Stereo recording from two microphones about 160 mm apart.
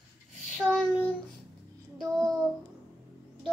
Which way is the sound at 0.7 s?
5° left (ahead or behind).